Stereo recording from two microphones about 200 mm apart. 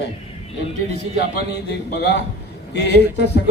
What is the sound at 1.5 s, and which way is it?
A man's voice, 55° left (ahead or behind).